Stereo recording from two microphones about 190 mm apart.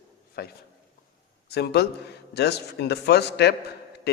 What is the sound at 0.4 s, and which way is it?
Speech, 55° left (ahead or behind).